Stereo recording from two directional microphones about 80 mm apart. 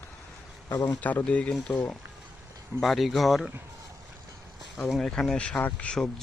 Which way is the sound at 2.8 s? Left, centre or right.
Centre.